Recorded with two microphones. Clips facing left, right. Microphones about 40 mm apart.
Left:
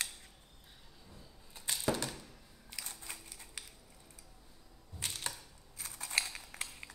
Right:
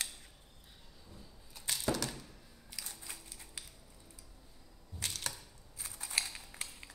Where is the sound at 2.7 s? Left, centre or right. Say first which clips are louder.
Left 1 dB; left.